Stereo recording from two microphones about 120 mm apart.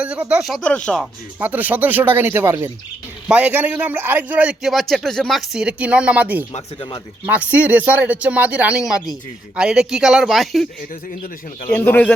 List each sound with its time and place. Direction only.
0.0 s speech: 10° right (ahead or behind)
0.4 s speech: centre (ahead or behind)
1.4 s a man's voice: 15° right (ahead or behind)
3.2 s a man's voice: 10° right (ahead or behind)
11.7 s speech: 15° left (ahead or behind)